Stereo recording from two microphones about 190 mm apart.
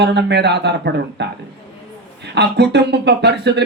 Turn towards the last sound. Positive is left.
turn(degrees=-60)  # may be behind; listen again after turning